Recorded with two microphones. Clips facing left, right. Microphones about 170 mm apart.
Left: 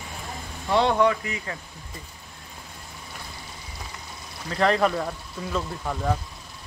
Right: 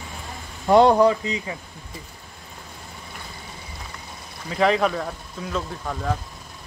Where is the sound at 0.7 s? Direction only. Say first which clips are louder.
Right 6 dB; 45° right (ahead or behind).